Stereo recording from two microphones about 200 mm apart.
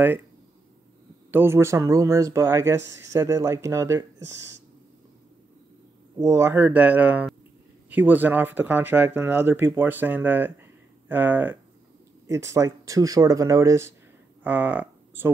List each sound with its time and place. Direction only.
1.3 s speech: 10° right (ahead or behind)
6.1 s speech: 15° right (ahead or behind)